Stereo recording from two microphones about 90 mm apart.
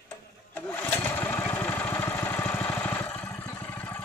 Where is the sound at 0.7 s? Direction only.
20° left (ahead or behind).